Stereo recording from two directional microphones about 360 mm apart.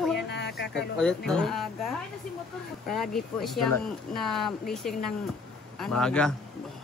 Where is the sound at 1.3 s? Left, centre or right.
Centre.